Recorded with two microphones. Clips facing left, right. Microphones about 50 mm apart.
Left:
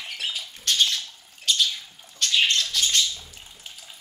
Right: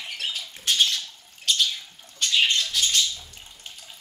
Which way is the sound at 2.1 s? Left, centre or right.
Centre.